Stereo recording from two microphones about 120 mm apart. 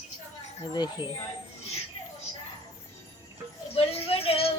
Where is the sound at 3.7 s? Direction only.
55° left (ahead or behind).